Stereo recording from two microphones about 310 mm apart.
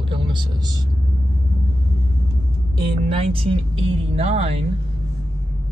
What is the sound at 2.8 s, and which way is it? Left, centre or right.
Speech, centre.